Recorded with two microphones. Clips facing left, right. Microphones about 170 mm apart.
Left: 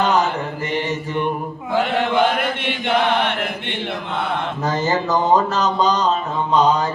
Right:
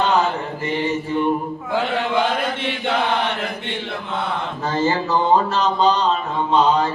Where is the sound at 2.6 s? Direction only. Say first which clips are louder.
Left 2 dB; 60° left (ahead or behind).